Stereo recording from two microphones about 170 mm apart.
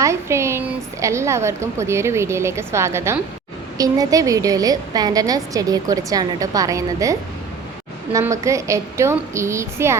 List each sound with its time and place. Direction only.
0.0 s a woman's voice: 15° right (ahead or behind)